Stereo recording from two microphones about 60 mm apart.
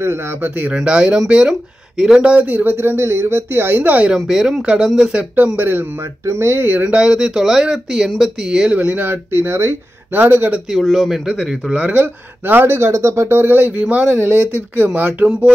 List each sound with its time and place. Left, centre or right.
0.0 s speech: right
0.7 s speech: centre
2.3 s speech: right
4.1 s speech: centre
5.6 s speech: right
6.2 s speech: right
6.9 s speech: centre; by 9.8 s right
10.1 s speech: right
10.7 s speech: centre
11.7 s speech: right
13.7 s speech: right